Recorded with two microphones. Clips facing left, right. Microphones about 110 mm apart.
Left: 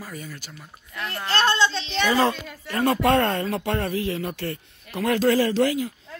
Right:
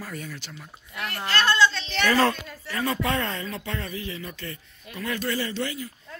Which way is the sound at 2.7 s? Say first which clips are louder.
Left 7 dB; 60° left (ahead or behind).